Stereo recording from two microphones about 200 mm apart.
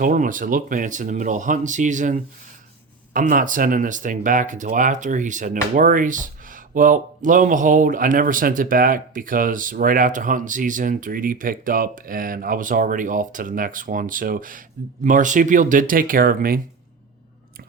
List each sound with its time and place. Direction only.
0.0 s speech: 40° right (ahead or behind)